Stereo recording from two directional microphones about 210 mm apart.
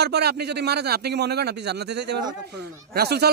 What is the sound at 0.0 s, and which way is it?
A man's voice, 50° right (ahead or behind).